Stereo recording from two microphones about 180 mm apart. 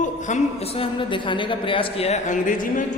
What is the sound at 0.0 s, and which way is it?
A woman's voice, 40° left (ahead or behind).